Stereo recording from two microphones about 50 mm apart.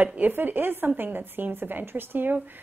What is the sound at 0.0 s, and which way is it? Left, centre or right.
Speech, right.